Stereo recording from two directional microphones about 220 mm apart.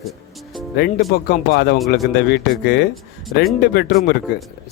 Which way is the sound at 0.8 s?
45° left (ahead or behind).